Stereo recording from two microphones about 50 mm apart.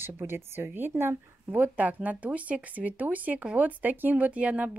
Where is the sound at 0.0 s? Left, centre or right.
Right.